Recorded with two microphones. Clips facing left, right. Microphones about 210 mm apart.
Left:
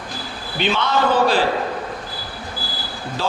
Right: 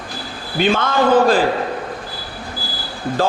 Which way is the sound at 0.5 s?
45° right (ahead or behind).